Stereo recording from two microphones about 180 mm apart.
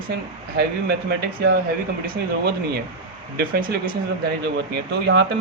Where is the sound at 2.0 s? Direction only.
60° right (ahead or behind).